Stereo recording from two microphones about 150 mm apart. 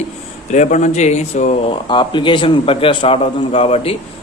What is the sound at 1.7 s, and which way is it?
A man's voice, 30° left (ahead or behind).